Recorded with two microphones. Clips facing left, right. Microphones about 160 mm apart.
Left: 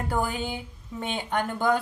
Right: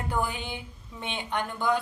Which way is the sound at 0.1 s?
40° left (ahead or behind).